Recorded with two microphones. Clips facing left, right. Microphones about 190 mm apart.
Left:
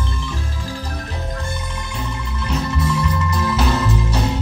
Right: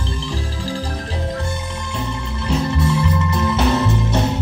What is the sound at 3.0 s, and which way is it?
Music, 25° right (ahead or behind).